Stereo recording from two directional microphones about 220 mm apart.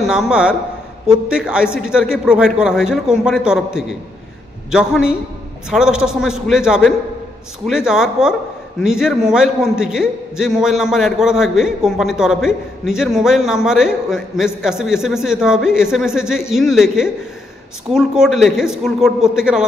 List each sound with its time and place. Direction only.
0.0 s a man's voice: centre (ahead or behind)